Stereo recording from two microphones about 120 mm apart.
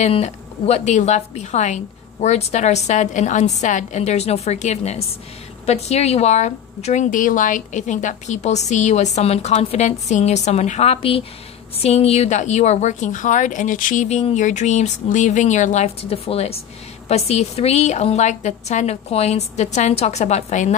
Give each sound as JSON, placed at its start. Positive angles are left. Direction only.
{"t": 0.0, "sound": "a woman's voice", "side_deg": 65}